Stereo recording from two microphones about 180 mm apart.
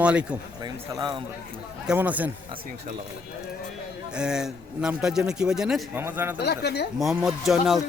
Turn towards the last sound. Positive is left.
turn(degrees=0)  # may be behind; listen again after turning